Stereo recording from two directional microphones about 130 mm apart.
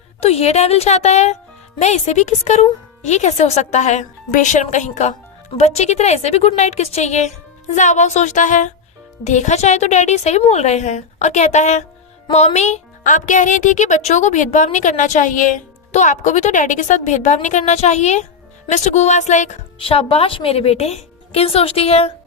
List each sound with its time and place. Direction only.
0.2 s speech: 55° left (ahead or behind); by 8.7 s 75° left (ahead or behind)
9.2 s speech: 65° left (ahead or behind)
19.8 s a woman's voice: 45° left (ahead or behind)